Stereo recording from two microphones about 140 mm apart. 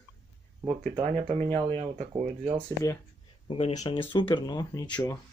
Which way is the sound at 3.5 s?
50° left (ahead or behind).